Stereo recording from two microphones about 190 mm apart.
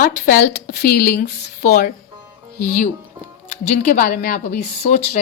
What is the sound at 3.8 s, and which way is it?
A woman's voice, 50° left (ahead or behind).